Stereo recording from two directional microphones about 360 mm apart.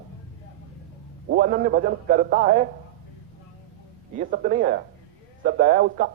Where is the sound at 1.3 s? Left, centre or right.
Right.